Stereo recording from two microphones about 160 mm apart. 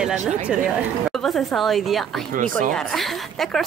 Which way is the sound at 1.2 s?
Centre (ahead or behind).